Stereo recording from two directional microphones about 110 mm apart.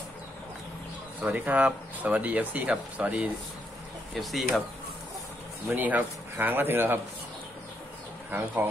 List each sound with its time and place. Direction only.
1.2 s speech: 15° right (ahead or behind)
4.1 s speech: centre (ahead or behind)
5.7 s speech: 15° right (ahead or behind)
8.3 s speech: 15° right (ahead or behind)